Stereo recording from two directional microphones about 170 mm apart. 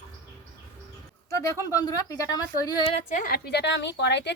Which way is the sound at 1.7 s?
20° left (ahead or behind).